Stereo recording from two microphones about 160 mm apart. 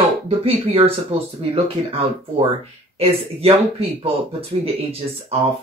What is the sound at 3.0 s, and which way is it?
Speech, 40° right (ahead or behind).